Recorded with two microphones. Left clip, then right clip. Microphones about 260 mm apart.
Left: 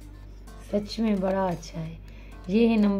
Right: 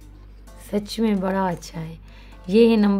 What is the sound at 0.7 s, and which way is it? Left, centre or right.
A woman's voice, right.